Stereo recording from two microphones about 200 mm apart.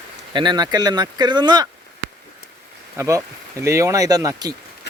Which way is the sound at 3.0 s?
15° right (ahead or behind).